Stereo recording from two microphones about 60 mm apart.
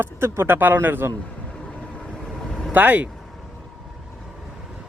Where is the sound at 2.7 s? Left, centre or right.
Right.